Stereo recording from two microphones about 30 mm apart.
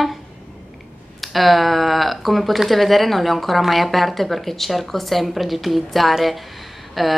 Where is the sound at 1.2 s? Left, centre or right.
Centre.